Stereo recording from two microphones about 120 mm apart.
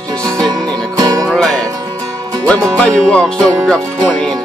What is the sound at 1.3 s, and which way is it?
Music, centre (ahead or behind).